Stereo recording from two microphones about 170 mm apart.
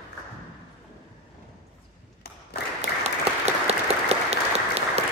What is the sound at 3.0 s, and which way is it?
Applause, 40° right (ahead or behind).